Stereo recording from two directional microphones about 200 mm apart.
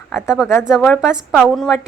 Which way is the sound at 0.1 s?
15° left (ahead or behind).